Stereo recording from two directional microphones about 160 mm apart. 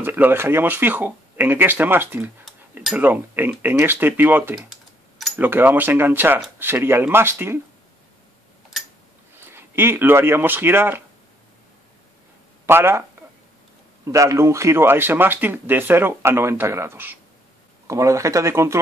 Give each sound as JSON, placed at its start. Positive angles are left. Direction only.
{"t": 0.0, "sound": "speech", "side_deg": -15}
{"t": 9.4, "sound": "speech", "side_deg": -15}
{"t": 12.6, "sound": "speech", "side_deg": -15}
{"t": 14.0, "sound": "speech", "side_deg": -20}